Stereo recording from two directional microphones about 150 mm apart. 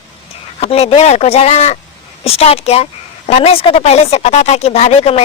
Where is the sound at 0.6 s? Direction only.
45° left (ahead or behind).